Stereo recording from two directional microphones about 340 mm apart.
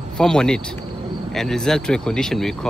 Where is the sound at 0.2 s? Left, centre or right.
Centre.